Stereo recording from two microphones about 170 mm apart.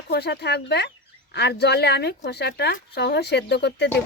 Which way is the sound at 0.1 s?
75° left (ahead or behind).